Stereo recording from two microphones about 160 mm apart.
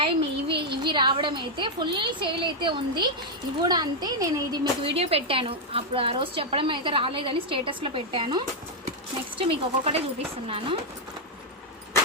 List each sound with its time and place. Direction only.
0.0 s a sound: 35° right (ahead or behind)
0.8 s a woman's voice: 30° right (ahead or behind)
4.8 s a woman's voice: 35° right (ahead or behind)